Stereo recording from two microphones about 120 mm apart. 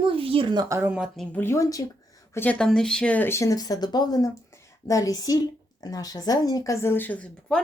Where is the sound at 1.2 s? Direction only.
15° left (ahead or behind).